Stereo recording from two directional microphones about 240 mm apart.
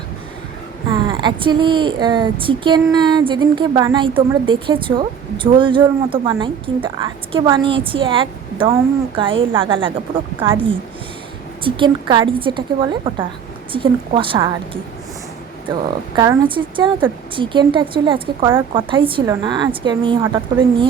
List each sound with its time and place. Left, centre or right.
0.9 s speech: centre
11.6 s speech: right
16.1 s a woman's voice: centre